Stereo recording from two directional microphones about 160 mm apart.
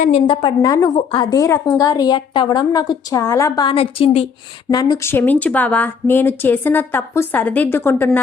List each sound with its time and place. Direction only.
0.1 s a woman's voice: 30° left (ahead or behind)
4.7 s a woman's voice: 25° left (ahead or behind)
5.1 s a woman's voice: 10° left (ahead or behind)